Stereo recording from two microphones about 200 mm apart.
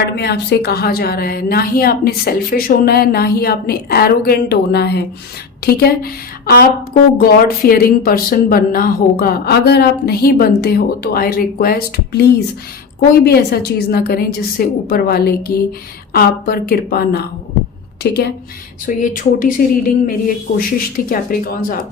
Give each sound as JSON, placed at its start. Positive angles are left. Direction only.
{"t": 0.2, "sound": "a woman's voice", "side_deg": 55}
{"t": 18.9, "sound": "a woman's voice", "side_deg": 40}